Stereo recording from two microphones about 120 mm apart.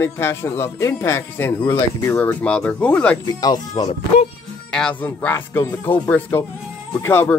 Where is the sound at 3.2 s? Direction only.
35° left (ahead or behind).